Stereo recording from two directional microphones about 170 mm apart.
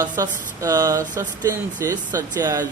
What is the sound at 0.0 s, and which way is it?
A man's voice, 20° right (ahead or behind).